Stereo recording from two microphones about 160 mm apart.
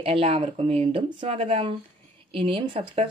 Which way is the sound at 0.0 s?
35° right (ahead or behind).